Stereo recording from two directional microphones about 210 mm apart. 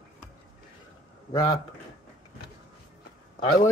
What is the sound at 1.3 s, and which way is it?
Speech, 15° left (ahead or behind).